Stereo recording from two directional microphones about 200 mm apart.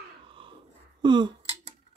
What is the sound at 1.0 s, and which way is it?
Finger snapping, 20° right (ahead or behind).